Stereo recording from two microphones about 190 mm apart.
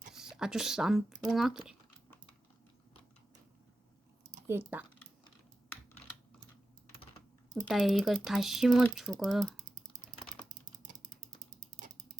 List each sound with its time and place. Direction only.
0.1 s a woman's voice: 5° right (ahead or behind)
4.4 s speech: 10° right (ahead or behind)
7.5 s speech: centre (ahead or behind)
9.6 s typing: 45° right (ahead or behind)
10.4 s mechanisms: 45° right (ahead or behind)